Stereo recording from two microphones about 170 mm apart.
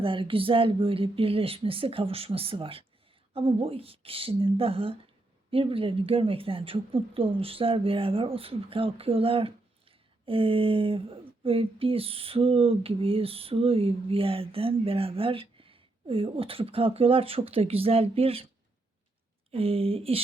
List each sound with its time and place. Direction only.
0.0 s speech: 30° right (ahead or behind)
19.5 s speech: 35° right (ahead or behind)